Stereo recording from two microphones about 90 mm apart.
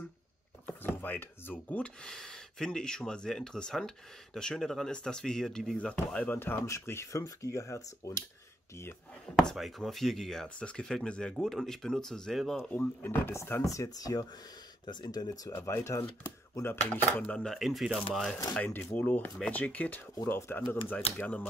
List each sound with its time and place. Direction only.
0.7 s chopping: 20° left (ahead or behind)
2.0 s speech: 5° left (ahead or behind)
6.1 s speech: 20° left (ahead or behind)
9.3 s speech: 5° left (ahead or behind)
12.5 s speech: 20° left (ahead or behind); by 15.5 s 45° left (ahead or behind)
15.5 s speech: 30° left (ahead or behind)
16.9 s speech: 15° left (ahead or behind)
17.4 s speech: centre (ahead or behind)
18.6 s speech: 20° left (ahead or behind)